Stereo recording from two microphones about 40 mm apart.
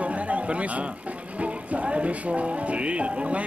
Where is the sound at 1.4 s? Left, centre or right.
Right.